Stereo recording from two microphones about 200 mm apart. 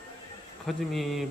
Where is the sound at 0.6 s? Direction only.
Centre (ahead or behind).